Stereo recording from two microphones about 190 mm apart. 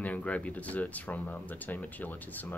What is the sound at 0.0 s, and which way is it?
Speech, 5° left (ahead or behind).